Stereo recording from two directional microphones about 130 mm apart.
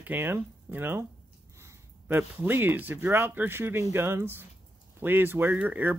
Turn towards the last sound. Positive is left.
turn(degrees=-15)  # may be behind; listen again after turning